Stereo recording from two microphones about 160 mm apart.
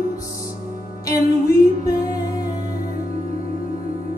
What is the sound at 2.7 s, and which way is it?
Music, 60° left (ahead or behind).